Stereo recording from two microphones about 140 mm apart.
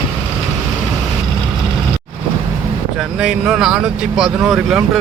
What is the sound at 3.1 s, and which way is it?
Speech, 5° right (ahead or behind).